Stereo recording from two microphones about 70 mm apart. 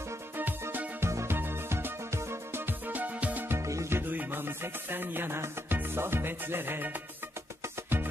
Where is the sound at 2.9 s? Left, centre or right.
Right.